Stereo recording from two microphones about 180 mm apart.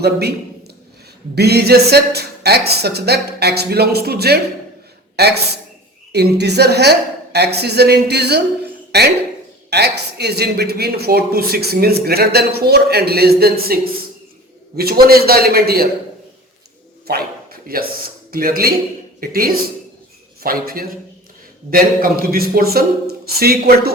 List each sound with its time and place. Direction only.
0.0 s speech: 65° right (ahead or behind)
1.4 s a man's voice: 65° right (ahead or behind)
14.8 s speech: 60° right (ahead or behind)
17.1 s bow-wow: 55° right (ahead or behind)
18.3 s speech: 55° right (ahead or behind)